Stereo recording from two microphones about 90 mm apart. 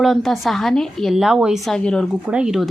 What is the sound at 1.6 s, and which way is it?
Speech, 10° left (ahead or behind).